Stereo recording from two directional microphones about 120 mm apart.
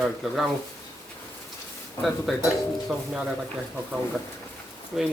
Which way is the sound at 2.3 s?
Centre (ahead or behind).